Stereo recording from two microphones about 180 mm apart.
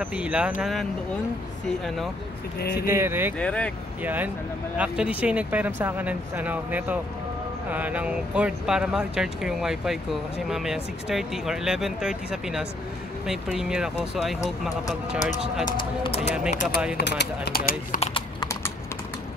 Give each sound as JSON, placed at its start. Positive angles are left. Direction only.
{"t": 0.0, "sound": "speech", "side_deg": -5}
{"t": 2.6, "sound": "speech", "side_deg": 55}
{"t": 2.9, "sound": "speech", "side_deg": -15}
{"t": 3.3, "sound": "speech", "side_deg": 5}
{"t": 4.0, "sound": "speech", "side_deg": -10}
{"t": 16.0, "sound": "speech", "side_deg": 35}
{"t": 16.9, "sound": "speech", "side_deg": 65}
{"t": 17.9, "sound": "clip-clop", "side_deg": 30}